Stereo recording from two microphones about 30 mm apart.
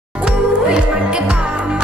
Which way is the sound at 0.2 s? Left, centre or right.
Right.